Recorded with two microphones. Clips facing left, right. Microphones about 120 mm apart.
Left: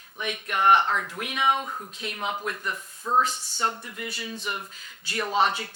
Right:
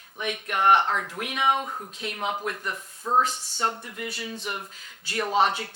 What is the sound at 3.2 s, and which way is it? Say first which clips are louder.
Speech: even; 65° right (ahead or behind).